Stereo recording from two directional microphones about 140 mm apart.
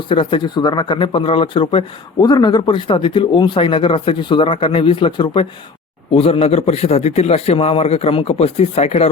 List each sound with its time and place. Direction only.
0.1 s a man's voice: 35° left (ahead or behind)